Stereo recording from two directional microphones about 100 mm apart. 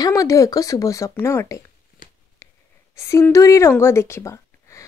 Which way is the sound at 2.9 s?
30° left (ahead or behind).